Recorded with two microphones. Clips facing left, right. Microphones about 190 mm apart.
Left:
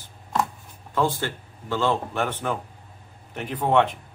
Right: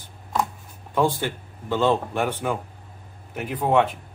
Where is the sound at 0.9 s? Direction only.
15° right (ahead or behind).